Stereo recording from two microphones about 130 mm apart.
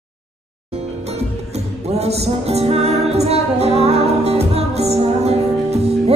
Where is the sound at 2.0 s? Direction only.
55° right (ahead or behind).